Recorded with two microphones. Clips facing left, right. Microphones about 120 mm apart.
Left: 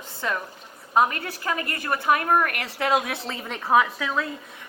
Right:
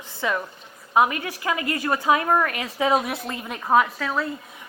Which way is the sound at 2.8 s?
20° right (ahead or behind).